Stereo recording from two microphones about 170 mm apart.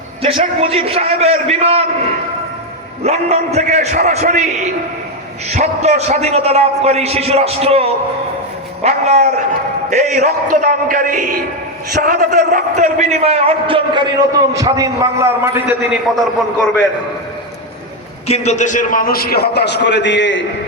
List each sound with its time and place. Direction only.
0.2 s a man's voice: 35° right (ahead or behind)
3.0 s a man's voice: 40° right (ahead or behind); by 16.0 s 10° right (ahead or behind)
16.1 s a man's voice: 5° left (ahead or behind)
18.3 s a man's voice: 40° left (ahead or behind); by 20.4 s 90° left